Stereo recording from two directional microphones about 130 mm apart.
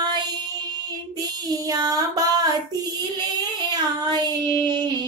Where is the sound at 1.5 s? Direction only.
30° right (ahead or behind).